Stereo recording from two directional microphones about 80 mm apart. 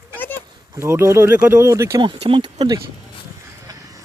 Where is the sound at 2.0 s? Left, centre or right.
Right.